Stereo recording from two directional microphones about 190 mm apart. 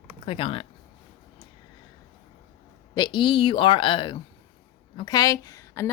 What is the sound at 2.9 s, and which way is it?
A woman's voice, 25° left (ahead or behind).